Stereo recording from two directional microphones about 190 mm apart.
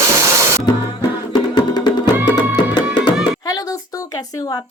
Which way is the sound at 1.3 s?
20° left (ahead or behind).